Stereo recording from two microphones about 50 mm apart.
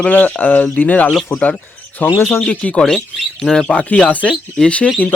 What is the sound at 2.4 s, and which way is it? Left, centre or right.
Speech, left.